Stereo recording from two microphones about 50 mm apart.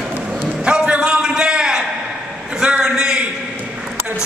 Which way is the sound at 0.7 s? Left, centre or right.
Right.